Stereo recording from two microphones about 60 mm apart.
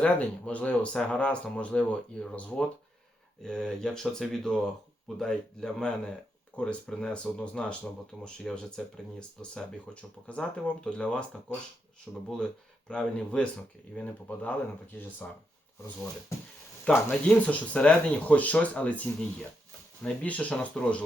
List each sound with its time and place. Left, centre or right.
0.0 s speech: left
17.1 s speech: centre